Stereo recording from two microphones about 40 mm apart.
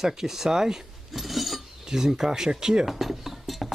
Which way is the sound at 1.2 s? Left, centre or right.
Centre.